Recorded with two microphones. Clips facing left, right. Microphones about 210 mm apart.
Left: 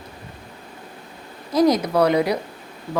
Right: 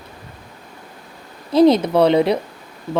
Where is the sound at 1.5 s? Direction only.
25° right (ahead or behind).